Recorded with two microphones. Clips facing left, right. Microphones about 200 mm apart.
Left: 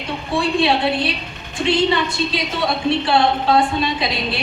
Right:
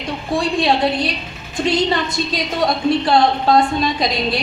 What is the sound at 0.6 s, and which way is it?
A woman's voice, 40° right (ahead or behind).